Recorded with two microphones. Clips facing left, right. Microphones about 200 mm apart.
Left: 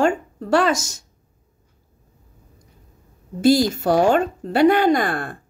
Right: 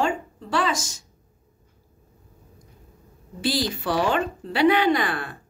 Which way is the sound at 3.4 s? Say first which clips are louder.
Left 10 dB; 45° left (ahead or behind).